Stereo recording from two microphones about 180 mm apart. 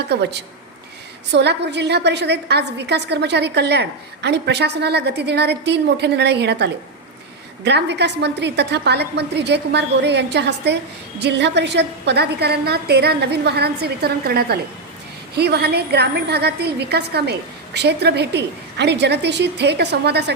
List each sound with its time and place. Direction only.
0.1 s a woman's voice: 70° right (ahead or behind)